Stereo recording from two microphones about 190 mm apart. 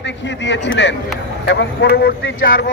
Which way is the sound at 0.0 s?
70° left (ahead or behind).